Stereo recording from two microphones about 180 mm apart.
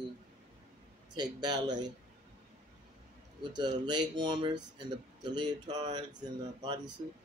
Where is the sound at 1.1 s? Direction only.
25° right (ahead or behind).